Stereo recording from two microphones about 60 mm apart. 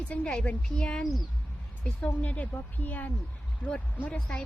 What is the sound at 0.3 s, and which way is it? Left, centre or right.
Speech, centre.